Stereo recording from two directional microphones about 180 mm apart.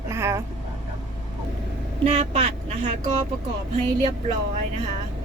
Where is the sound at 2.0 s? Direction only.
40° right (ahead or behind).